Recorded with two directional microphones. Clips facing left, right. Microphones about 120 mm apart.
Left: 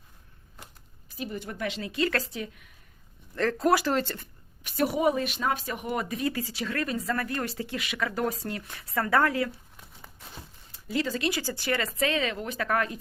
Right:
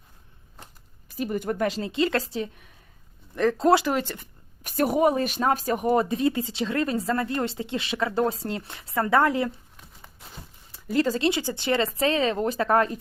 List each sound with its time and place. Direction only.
1.1 s speech: 50° right (ahead or behind)
1.9 s speech: 25° right (ahead or behind)
3.3 s speech: 15° right (ahead or behind)
4.6 s speech: 45° right (ahead or behind); by 9.5 s 25° right (ahead or behind)
10.8 s speech: 45° right (ahead or behind)
11.2 s speech: 25° right (ahead or behind)